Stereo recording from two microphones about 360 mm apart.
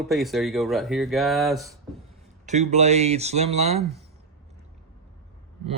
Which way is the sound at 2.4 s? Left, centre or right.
Centre.